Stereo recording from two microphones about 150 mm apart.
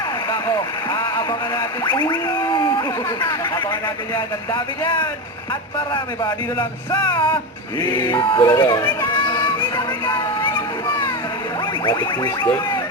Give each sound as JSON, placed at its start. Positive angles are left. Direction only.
{"t": 0.3, "sound": "vehicle", "side_deg": 25}
{"t": 1.8, "sound": "speech", "side_deg": 30}
{"t": 5.9, "sound": "speech", "side_deg": 25}
{"t": 11.9, "sound": "music", "side_deg": 30}